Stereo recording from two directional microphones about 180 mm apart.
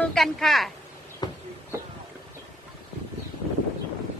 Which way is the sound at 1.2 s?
20° left (ahead or behind).